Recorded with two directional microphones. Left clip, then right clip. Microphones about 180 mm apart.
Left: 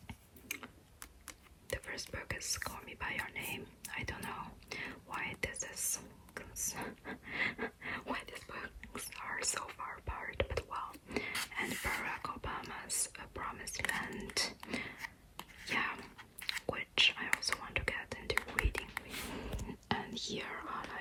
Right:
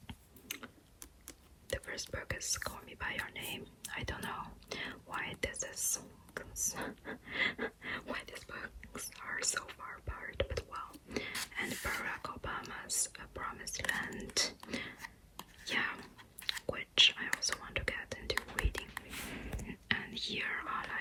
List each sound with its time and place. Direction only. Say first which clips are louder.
0.1 s typing: left 1 dB; centre (ahead or behind)
1.7 s whispering: right 1 dB; centre (ahead or behind)
2.1 s speech: right 2 dB; centre (ahead or behind); by 10.3 s 15° left (ahead or behind)
10.3 s speech: even; 5° left (ahead or behind)
14.3 s whispering: right 3 dB; centre (ahead or behind)
19.6 s whispering: right 3 dB; 20° left (ahead or behind)